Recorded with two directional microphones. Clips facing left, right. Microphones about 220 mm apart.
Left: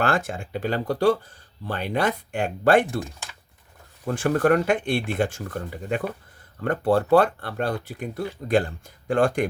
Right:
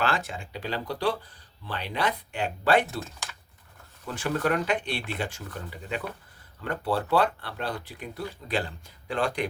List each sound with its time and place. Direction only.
0.0 s speech: 50° left (ahead or behind)
4.0 s speech: 50° left (ahead or behind)